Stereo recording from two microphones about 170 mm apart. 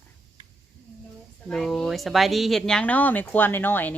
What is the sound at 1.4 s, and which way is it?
Speech, centre (ahead or behind).